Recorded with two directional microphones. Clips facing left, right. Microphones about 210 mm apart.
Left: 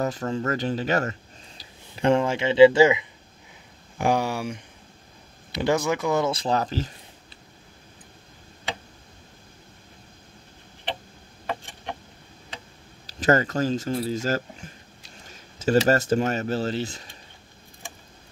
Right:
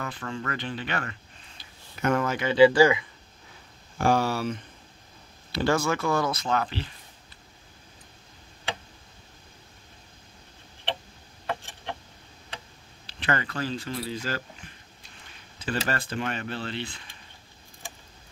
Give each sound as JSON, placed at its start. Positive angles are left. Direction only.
{"t": 0.0, "sound": "speech", "side_deg": 40}
{"t": 1.6, "sound": "speech", "side_deg": 30}
{"t": 13.0, "sound": "speech", "side_deg": 40}